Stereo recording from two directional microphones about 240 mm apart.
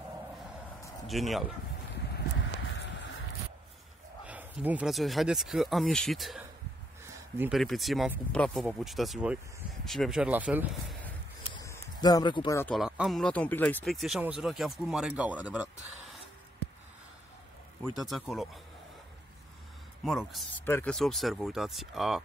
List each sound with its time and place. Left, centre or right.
1.0 s speech: centre
2.7 s a sound: left
4.3 s speech: centre
11.5 s a sound: centre
12.7 s speech: centre
17.8 s speech: centre
20.1 s speech: centre